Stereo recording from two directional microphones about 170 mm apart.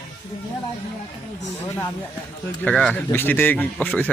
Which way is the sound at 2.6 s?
5° left (ahead or behind).